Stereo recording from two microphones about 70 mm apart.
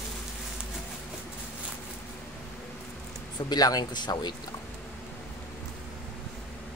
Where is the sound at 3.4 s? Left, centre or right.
Left.